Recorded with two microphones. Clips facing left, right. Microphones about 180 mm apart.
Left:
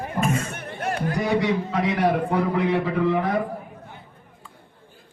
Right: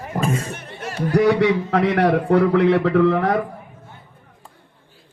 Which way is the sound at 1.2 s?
70° right (ahead or behind).